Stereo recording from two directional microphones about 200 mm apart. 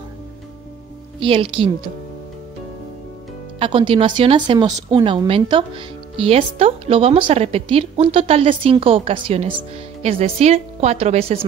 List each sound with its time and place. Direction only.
1.2 s speech: 25° right (ahead or behind)
3.5 s speech: 25° right (ahead or behind)